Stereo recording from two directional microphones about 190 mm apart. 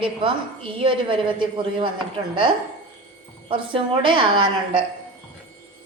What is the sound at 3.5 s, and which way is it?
Speech, 25° right (ahead or behind).